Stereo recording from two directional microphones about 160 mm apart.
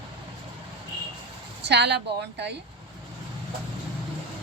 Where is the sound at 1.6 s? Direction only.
90° right.